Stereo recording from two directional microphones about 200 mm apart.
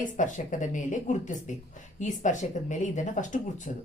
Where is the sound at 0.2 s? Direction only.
40° left (ahead or behind).